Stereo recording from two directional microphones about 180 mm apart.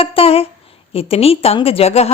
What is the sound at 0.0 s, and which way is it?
A woman's voice, 30° left (ahead or behind).